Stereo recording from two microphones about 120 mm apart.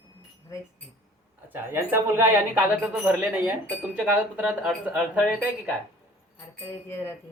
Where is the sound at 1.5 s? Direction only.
20° right (ahead or behind).